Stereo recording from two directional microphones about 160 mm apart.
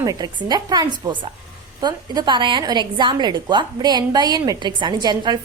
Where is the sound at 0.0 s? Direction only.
25° right (ahead or behind).